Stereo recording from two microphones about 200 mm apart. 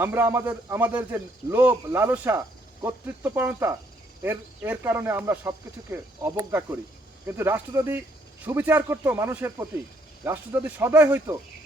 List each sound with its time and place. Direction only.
0.0 s speech: 10° right (ahead or behind)